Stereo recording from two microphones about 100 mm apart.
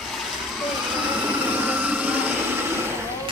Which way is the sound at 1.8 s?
15° right (ahead or behind).